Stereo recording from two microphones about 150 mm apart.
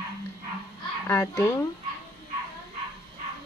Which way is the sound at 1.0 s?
20° left (ahead or behind).